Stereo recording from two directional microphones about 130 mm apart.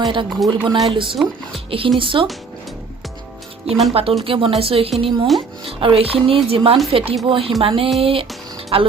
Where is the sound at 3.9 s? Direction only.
45° right (ahead or behind).